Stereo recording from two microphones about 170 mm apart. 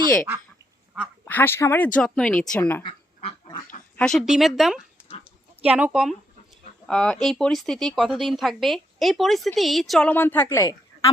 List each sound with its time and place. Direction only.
1.2 s a woman's voice: 10° left (ahead or behind)
2.8 s duck: 30° left (ahead or behind)
3.9 s a woman's voice: 5° left (ahead or behind)